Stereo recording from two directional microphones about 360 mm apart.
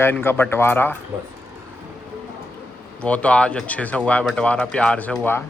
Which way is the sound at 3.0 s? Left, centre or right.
Centre.